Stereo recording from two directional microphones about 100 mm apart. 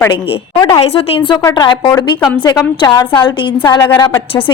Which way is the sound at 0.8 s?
75° left (ahead or behind).